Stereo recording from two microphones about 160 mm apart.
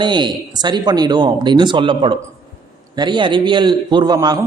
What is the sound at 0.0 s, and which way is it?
A man's voice, 30° right (ahead or behind).